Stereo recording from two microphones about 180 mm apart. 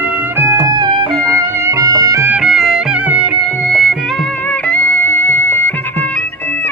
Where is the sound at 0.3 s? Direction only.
15° right (ahead or behind).